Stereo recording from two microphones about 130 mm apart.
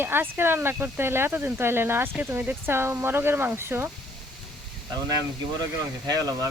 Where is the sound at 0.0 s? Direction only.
15° right (ahead or behind).